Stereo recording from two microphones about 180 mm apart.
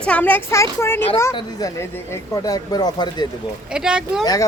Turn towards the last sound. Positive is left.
turn(degrees=-5)  # may be behind; listen again after turning